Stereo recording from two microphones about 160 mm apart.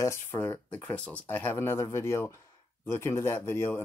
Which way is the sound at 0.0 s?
15° left (ahead or behind).